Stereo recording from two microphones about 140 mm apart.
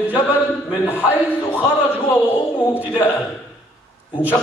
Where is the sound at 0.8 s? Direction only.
15° left (ahead or behind).